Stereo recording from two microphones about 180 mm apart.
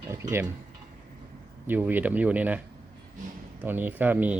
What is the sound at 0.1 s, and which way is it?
Tick-tock, 15° right (ahead or behind).